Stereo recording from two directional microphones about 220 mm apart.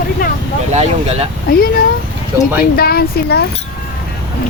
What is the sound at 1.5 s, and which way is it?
Speech, 40° left (ahead or behind).